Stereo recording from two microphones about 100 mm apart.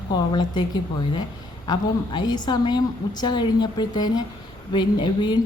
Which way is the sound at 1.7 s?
45° left (ahead or behind).